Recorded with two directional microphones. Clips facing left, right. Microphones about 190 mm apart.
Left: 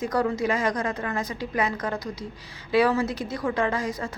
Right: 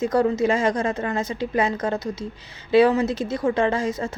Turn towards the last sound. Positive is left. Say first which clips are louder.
# right 4 dB
turn(degrees=-25)  # may be behind; listen again after turning